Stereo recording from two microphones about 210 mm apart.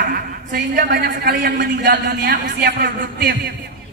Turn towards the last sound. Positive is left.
turn(degrees=-45)  # may be behind; listen again after turning